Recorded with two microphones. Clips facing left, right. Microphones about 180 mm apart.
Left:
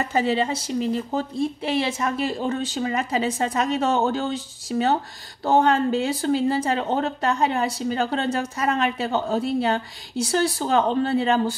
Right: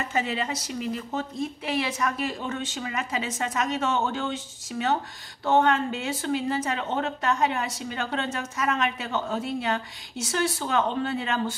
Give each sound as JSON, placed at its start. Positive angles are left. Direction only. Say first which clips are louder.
{"t": 0.0, "sound": "speech", "louder": "left 6 dB", "side_deg": 35}